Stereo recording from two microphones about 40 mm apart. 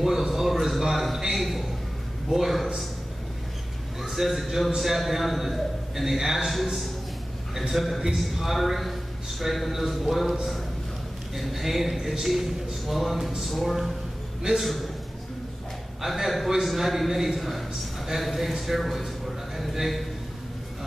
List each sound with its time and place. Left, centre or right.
0.0 s a sound: centre
2.2 s a man's voice: centre
4.0 s a man's voice: centre
11.3 s a man's voice: centre
16.0 s a man's voice: centre